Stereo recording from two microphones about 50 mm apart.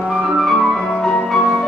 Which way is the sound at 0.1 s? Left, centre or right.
Centre.